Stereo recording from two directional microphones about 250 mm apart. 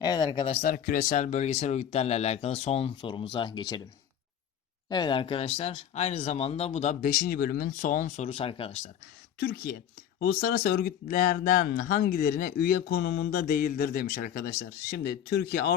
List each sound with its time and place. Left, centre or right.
0.0 s speech: centre
4.9 s speech: centre
9.4 s speech: left